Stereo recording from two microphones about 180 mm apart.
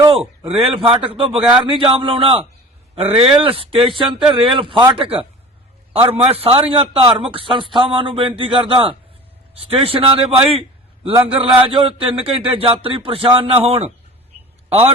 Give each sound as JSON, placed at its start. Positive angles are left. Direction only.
{"t": 0.4, "sound": "a man's voice", "side_deg": -30}